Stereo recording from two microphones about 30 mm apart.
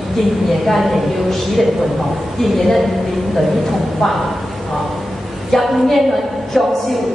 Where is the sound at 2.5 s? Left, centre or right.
Centre.